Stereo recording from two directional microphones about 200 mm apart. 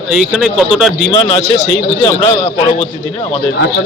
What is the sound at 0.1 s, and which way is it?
Speech, centre (ahead or behind).